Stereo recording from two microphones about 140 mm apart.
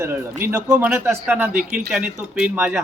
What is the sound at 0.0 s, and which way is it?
Speech, 20° right (ahead or behind).